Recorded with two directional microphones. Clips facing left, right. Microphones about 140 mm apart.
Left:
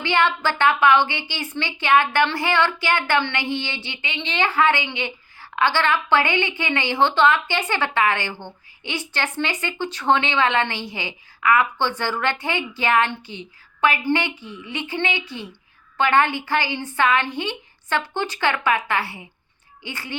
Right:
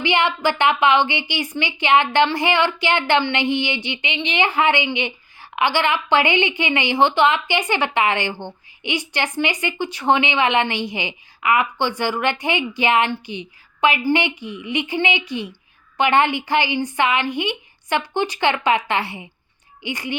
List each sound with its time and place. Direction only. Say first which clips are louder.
0.0 s a woman's voice: right 1 dB; 15° right (ahead or behind)